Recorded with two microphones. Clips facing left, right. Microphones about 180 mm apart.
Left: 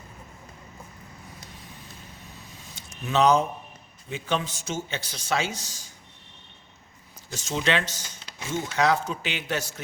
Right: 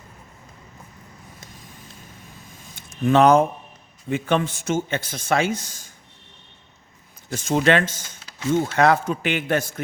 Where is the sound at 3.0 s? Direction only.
55° right (ahead or behind).